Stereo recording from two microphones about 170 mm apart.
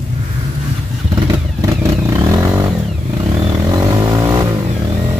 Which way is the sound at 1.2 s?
20° right (ahead or behind).